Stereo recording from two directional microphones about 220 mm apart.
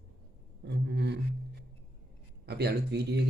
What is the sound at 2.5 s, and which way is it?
Speech, 45° right (ahead or behind).